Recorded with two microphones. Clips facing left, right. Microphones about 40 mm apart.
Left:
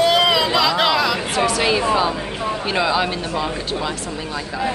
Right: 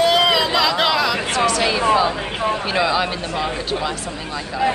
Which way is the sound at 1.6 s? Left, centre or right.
Centre.